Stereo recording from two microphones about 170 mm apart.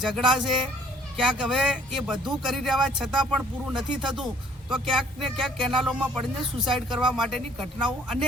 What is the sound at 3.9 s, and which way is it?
Speech, 30° right (ahead or behind).